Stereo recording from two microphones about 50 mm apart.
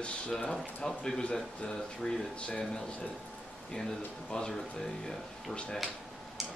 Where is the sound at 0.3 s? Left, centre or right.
Centre.